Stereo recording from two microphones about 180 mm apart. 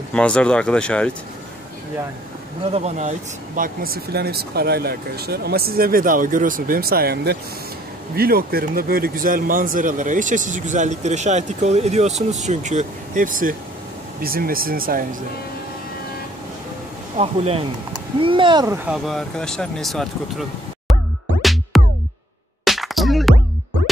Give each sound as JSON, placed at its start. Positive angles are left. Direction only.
{"t": 0.1, "sound": "speech", "side_deg": 5}
{"t": 2.7, "sound": "a man's voice", "side_deg": -40}
{"t": 17.2, "sound": "speech", "side_deg": -35}
{"t": 18.9, "sound": "speech", "side_deg": 0}
{"t": 21.4, "sound": "music", "side_deg": 0}